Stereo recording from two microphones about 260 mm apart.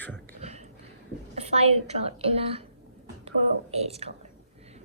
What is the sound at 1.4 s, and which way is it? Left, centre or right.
A woman's voice, right.